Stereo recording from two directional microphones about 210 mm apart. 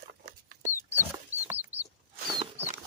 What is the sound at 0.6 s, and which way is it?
Chicken, 10° right (ahead or behind).